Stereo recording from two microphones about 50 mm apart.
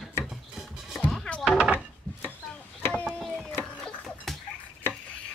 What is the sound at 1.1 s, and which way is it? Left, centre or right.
Music, centre.